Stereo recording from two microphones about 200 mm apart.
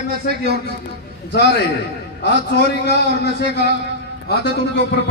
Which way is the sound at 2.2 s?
60° left (ahead or behind).